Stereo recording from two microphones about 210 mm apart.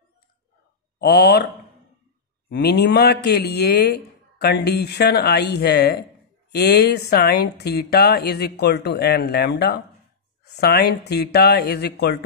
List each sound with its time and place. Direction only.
0.9 s a man's voice: 50° left (ahead or behind)
2.5 s a man's voice: 50° left (ahead or behind)